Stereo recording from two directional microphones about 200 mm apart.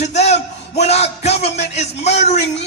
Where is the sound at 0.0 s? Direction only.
35° left (ahead or behind).